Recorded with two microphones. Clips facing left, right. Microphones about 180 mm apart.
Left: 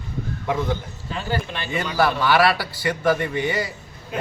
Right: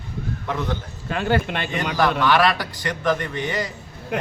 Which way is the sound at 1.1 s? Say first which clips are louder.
Right 5 dB; 65° right (ahead or behind).